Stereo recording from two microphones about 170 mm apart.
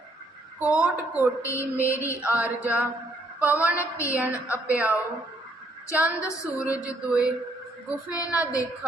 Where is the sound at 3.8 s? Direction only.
15° left (ahead or behind).